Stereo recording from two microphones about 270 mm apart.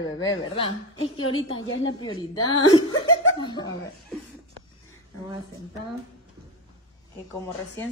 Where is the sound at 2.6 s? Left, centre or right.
Left.